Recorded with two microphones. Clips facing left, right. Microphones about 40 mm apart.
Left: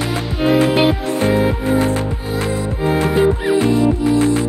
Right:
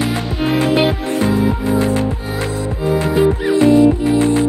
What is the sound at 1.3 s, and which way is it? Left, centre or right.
Music, left.